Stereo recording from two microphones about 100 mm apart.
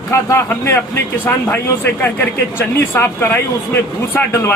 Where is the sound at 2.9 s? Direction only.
25° left (ahead or behind).